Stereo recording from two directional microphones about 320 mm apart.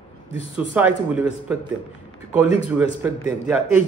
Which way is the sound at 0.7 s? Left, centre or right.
Centre.